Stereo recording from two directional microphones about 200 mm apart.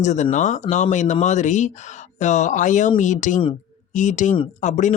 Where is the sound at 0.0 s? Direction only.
35° left (ahead or behind).